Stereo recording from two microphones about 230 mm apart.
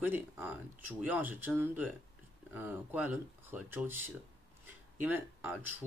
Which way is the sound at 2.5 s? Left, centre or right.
Centre.